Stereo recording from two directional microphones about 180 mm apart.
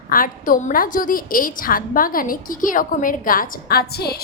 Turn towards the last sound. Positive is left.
turn(degrees=60)  # may be behind; listen again after turning